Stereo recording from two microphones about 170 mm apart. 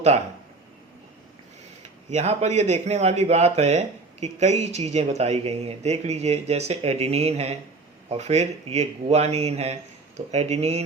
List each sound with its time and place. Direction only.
2.0 s speech: 40° right (ahead or behind)